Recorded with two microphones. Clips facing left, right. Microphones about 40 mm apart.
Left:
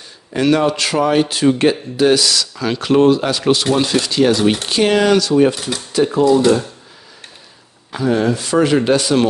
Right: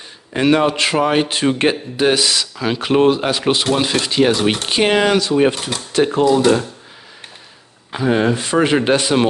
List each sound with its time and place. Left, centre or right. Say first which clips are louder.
0.3 s speech: even; right
3.7 s speech: left 2 dB; centre
4.0 s speech: left 1 dB; right
5.9 s speech: even; right
6.3 s speech: left 1 dB; right
7.9 s speech: even; right